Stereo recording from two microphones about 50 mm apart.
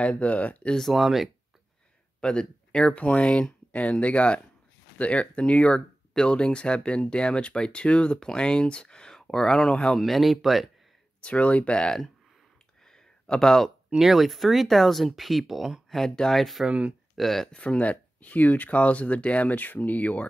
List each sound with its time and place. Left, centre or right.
0.0 s speech: left
0.8 s speech: centre
2.1 s speech: centre
9.9 s speech: centre
11.1 s speech: left
12.9 s a sound: centre
13.9 s speech: centre
17.5 s speech: left